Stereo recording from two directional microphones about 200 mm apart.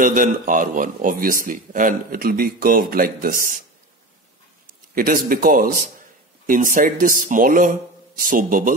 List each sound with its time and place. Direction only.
0.0 s a man's voice: 40° right (ahead or behind)
4.9 s a man's voice: 45° right (ahead or behind)